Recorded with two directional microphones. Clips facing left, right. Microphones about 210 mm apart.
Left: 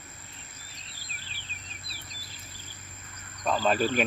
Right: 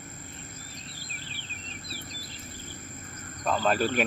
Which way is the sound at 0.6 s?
50° right (ahead or behind).